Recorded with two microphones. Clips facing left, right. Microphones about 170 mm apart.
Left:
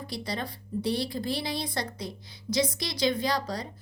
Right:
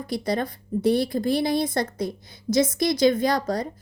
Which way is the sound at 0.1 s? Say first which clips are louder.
Right 10 dB; 50° right (ahead or behind).